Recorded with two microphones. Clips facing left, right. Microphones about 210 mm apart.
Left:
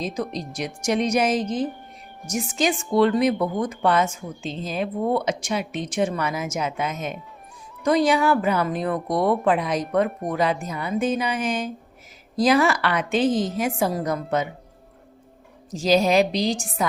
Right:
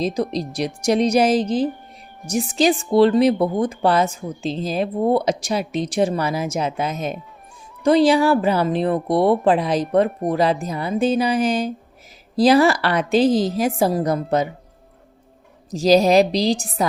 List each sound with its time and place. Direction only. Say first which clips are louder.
0.0 s speech: right 6 dB; 35° right (ahead or behind)
15.7 s speech: right 5 dB; 40° right (ahead or behind)